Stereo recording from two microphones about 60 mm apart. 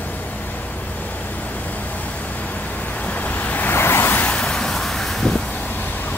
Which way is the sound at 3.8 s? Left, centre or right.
Left.